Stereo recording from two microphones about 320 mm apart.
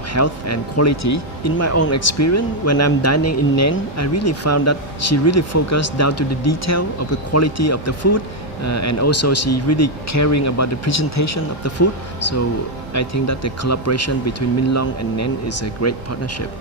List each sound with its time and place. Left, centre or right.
0.1 s speech: left
12.9 s speech: left